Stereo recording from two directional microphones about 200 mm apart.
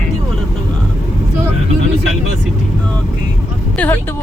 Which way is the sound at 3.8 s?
5° left (ahead or behind).